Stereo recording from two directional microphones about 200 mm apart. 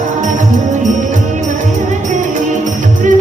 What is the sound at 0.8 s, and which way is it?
Music, 40° right (ahead or behind).